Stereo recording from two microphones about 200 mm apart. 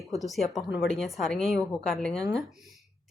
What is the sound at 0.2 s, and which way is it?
Speech, centre (ahead or behind).